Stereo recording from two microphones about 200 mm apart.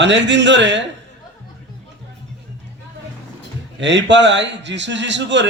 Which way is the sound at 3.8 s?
65° right (ahead or behind).